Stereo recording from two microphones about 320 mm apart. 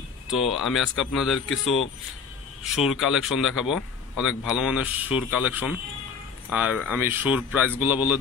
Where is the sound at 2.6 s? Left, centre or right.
Centre.